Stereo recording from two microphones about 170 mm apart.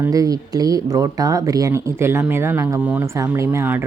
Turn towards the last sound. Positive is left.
turn(degrees=-15)  # may be behind; listen again after turning